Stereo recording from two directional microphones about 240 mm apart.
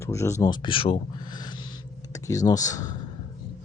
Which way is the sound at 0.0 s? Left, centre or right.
Centre.